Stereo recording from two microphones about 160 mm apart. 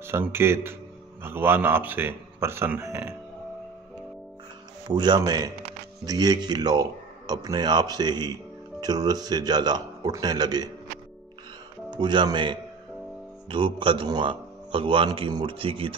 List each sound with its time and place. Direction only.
0.0 s a man's voice: 15° right (ahead or behind)
4.8 s speech: 25° right (ahead or behind)
11.9 s a man's voice: 30° right (ahead or behind)